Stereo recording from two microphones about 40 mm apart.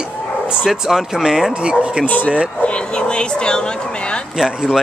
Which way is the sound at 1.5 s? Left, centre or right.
Right.